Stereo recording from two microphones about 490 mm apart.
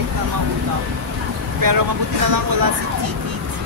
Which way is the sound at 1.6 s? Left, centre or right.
Right.